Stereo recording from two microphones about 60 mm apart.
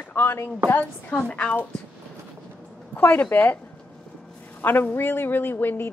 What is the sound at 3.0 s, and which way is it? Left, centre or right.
Speech, left.